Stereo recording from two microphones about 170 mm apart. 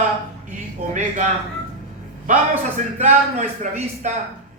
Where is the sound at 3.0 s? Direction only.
45° right (ahead or behind).